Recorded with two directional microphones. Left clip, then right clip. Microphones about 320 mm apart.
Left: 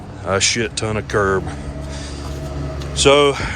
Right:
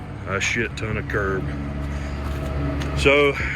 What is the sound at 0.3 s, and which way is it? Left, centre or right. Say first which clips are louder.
Speech: left 5 dB; centre.